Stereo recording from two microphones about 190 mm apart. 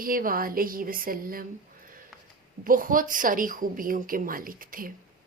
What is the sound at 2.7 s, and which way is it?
Speech, 45° right (ahead or behind).